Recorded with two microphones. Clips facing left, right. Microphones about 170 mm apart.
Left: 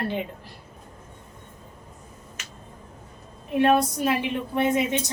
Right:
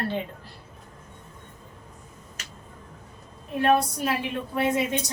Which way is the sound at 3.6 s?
20° left (ahead or behind).